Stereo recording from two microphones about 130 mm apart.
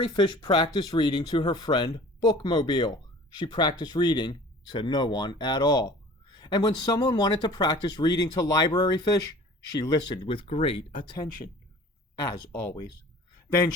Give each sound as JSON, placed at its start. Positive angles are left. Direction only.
{"t": 0.0, "sound": "speech", "side_deg": 35}